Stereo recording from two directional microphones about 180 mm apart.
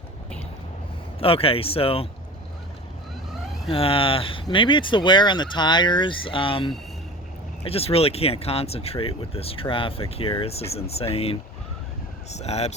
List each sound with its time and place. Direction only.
1.2 s speech: 30° left (ahead or behind)
3.7 s speech: 30° left (ahead or behind)